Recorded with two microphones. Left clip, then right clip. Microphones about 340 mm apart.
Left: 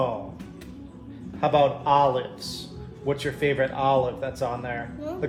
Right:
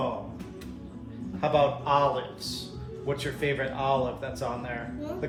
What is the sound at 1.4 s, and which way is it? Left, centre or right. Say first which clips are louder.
A man's voice: left 4 dB; left.